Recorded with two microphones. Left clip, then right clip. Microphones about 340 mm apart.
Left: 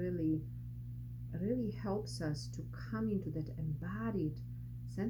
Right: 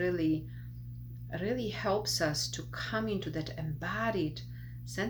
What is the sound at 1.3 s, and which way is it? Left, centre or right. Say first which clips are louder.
Speech: right 5 dB; centre.